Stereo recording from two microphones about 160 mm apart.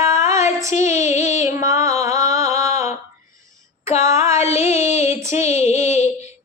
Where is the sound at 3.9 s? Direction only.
15° right (ahead or behind).